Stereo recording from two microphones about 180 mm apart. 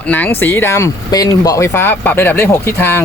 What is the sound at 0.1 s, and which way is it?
Speech, 10° left (ahead or behind).